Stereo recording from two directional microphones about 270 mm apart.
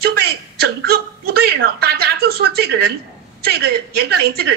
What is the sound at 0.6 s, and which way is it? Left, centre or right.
A woman's voice, right.